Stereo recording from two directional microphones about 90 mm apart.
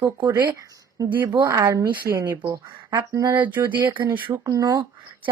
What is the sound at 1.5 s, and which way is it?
Speech, 35° right (ahead or behind).